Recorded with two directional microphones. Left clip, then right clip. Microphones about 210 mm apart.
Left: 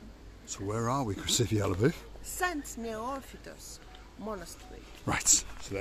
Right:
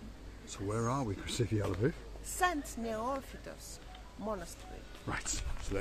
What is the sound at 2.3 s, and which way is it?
A woman's voice, centre (ahead or behind).